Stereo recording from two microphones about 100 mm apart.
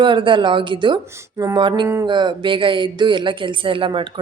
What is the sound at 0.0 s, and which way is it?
Speech, 55° right (ahead or behind).